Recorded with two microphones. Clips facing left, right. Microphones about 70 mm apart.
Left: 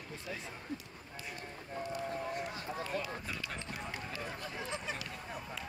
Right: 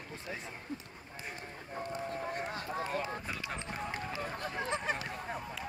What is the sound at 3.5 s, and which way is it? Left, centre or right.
Run, right.